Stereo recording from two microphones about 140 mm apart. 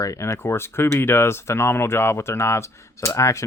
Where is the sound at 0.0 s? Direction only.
20° left (ahead or behind).